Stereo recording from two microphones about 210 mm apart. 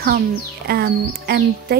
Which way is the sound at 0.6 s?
50° right (ahead or behind).